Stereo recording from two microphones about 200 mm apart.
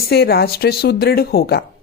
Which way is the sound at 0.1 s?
55° left (ahead or behind).